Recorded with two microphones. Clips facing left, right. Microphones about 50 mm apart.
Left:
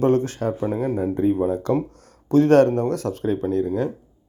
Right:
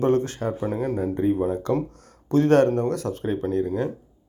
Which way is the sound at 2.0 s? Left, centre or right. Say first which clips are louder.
Left 3 dB; right.